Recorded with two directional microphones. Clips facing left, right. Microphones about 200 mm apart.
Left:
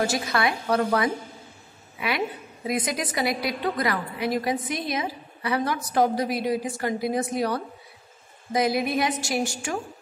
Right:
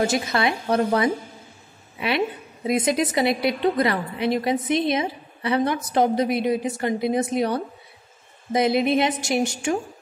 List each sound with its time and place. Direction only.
0.0 s a woman's voice: 20° right (ahead or behind)